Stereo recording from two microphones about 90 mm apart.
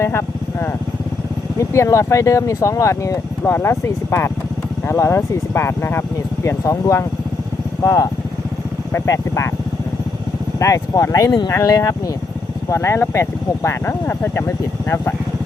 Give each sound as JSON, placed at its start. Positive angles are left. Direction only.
{"t": 0.0, "sound": "speech", "side_deg": 25}
{"t": 8.9, "sound": "speech", "side_deg": 35}
{"t": 10.6, "sound": "speech", "side_deg": 35}
{"t": 11.5, "sound": "speech", "side_deg": 35}